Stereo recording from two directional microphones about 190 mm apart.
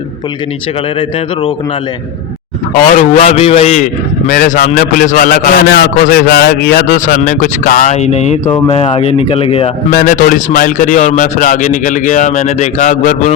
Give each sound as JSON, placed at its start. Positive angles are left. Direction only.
{"t": 0.9, "sound": "speech", "side_deg": 30}
{"t": 3.2, "sound": "a man's voice", "side_deg": 35}
{"t": 7.0, "sound": "speech", "side_deg": 45}
{"t": 8.4, "sound": "speech", "side_deg": 20}
{"t": 8.7, "sound": "speech", "side_deg": 30}
{"t": 9.9, "sound": "a man's voice", "side_deg": 45}